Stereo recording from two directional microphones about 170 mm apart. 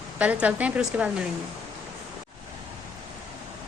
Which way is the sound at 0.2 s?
10° right (ahead or behind).